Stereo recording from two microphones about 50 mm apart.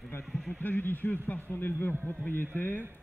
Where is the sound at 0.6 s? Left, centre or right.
Left.